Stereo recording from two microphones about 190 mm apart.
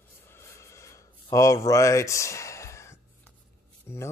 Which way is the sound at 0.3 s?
15° left (ahead or behind).